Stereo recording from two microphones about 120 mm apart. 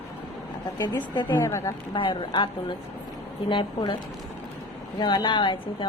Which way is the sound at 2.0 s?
45° left (ahead or behind).